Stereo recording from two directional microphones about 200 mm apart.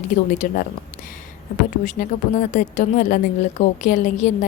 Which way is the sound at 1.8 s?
40° left (ahead or behind).